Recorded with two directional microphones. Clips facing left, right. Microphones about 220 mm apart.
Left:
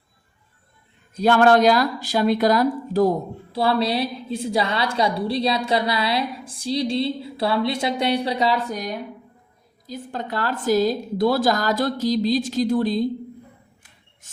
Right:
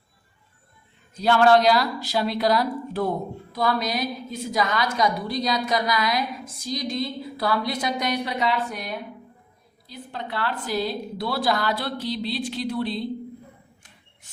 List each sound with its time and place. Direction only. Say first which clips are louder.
1.2 s a woman's voice: left 2 dB; 50° left (ahead or behind)